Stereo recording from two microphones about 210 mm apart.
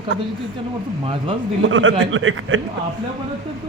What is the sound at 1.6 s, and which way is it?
A man's voice, 65° right (ahead or behind).